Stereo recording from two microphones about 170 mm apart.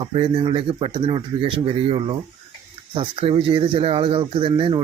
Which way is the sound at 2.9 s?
30° right (ahead or behind).